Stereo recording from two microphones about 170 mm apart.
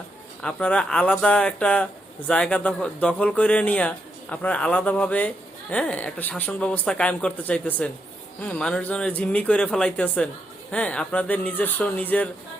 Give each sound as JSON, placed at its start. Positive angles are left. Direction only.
{"t": 0.4, "sound": "speech", "side_deg": 5}